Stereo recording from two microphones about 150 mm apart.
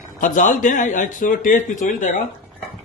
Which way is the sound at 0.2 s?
60° left (ahead or behind).